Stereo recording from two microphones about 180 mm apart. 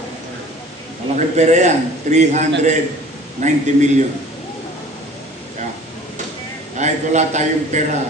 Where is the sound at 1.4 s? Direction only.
40° right (ahead or behind).